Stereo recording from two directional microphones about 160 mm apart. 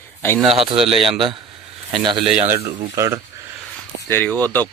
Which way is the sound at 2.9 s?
20° right (ahead or behind).